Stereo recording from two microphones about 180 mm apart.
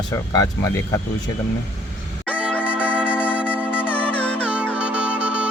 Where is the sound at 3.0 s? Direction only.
10° left (ahead or behind).